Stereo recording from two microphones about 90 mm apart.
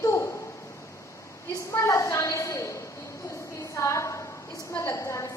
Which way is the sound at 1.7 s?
30° left (ahead or behind).